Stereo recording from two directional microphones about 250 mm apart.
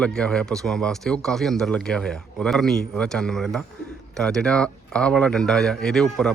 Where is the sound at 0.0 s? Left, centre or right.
Centre.